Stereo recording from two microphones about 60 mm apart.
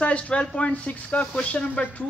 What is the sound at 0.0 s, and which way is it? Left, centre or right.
Speech, centre.